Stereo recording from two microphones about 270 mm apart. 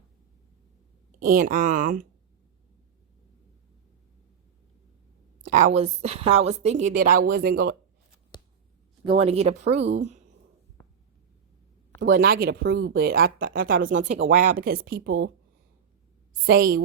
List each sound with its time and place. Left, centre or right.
1.2 s a woman's voice: right
5.4 s a woman's voice: right
9.0 s a woman's voice: right
9.8 s speech: right
11.9 s a woman's voice: right
16.5 s speech: right